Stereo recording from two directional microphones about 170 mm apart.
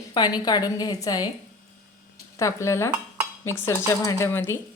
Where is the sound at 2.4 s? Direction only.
15° left (ahead or behind).